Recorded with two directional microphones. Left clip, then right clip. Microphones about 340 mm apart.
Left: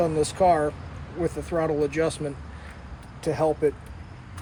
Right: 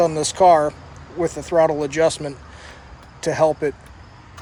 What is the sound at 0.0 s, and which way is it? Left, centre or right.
Speech, right.